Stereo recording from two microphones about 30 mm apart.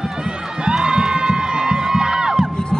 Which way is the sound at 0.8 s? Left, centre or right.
Right.